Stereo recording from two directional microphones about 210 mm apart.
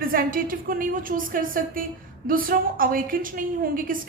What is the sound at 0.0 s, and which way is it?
A woman's voice, 45° right (ahead or behind).